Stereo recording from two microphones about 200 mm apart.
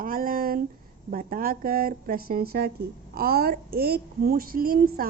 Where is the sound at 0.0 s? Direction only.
45° right (ahead or behind).